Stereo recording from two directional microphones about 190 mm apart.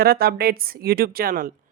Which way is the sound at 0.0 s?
55° right (ahead or behind).